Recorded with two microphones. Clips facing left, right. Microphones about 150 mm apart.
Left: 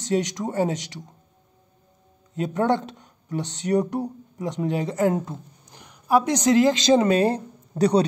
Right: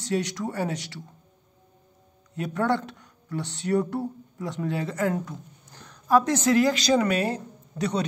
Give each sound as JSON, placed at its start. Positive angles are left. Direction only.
{"t": 0.0, "sound": "speech", "side_deg": 20}
{"t": 2.3, "sound": "speech", "side_deg": 20}